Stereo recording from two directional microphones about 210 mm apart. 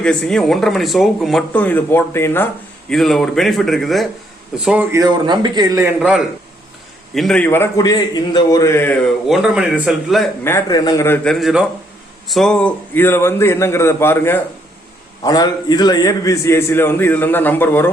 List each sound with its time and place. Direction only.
0.0 s a man's voice: 5° left (ahead or behind); by 5.9 s 15° right (ahead or behind)
6.0 s a man's voice: centre (ahead or behind)
10.4 s a man's voice: 15° left (ahead or behind)